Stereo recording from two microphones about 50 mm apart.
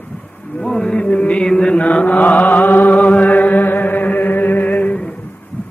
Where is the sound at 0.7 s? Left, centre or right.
Left.